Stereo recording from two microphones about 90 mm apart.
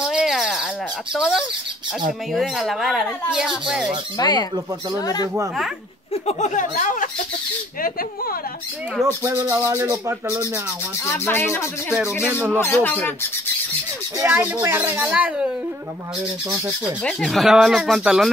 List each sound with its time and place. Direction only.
0.0 s squawk: 5° right (ahead or behind)
1.1 s speech: 5° right (ahead or behind)
4.2 s speech: 50° left (ahead or behind)
9.0 s speech: 30° right (ahead or behind)
11.1 s speech: 25° left (ahead or behind)
12.3 s speech: 15° right (ahead or behind)
12.5 s speech: 30° left (ahead or behind)
14.3 s speech: 25° right (ahead or behind)
14.8 s speech: 15° right (ahead or behind)
17.0 s speech: 5° left (ahead or behind)